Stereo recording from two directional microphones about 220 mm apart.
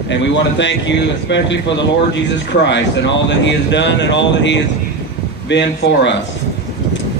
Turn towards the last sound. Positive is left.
turn(degrees=50)  # may be behind; listen again after turning